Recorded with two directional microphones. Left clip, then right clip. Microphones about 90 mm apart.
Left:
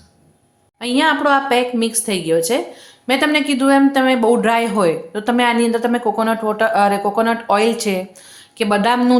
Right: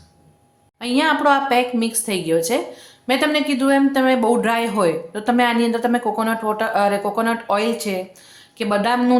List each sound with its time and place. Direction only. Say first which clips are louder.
0.8 s a woman's voice: left 2 dB; 10° left (ahead or behind)